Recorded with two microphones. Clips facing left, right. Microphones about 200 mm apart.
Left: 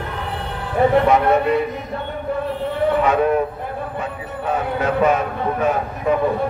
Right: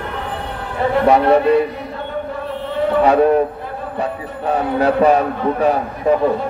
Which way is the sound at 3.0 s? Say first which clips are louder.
Right 7 dB; 35° right (ahead or behind).